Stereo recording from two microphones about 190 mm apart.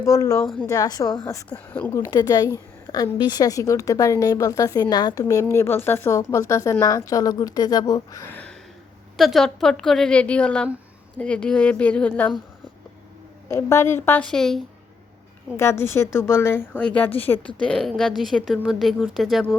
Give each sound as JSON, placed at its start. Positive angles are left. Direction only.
{"t": 0.0, "sound": "a woman's voice", "side_deg": 15}
{"t": 13.5, "sound": "a woman's voice", "side_deg": 15}
{"t": 15.5, "sound": "a woman's voice", "side_deg": 15}